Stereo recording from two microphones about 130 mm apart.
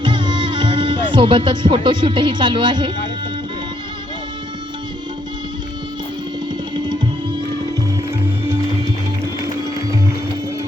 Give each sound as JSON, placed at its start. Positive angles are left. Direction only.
{"t": 0.0, "sound": "music", "side_deg": -35}
{"t": 6.7, "sound": "music", "side_deg": -35}